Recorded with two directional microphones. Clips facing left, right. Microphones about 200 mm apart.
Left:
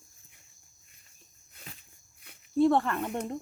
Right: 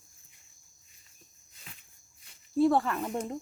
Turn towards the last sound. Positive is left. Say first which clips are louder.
# even
turn(degrees=0)  # may be behind; listen again after turning